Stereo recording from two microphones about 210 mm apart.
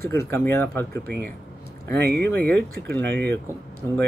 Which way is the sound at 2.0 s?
50° right (ahead or behind).